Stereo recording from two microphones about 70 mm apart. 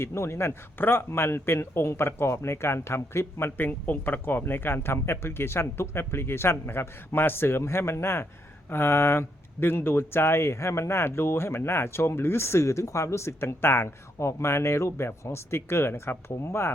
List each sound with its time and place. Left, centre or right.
0.0 s speech: left
3.7 s speech: left